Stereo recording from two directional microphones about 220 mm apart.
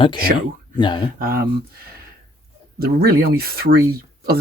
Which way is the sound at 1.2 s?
45° right (ahead or behind).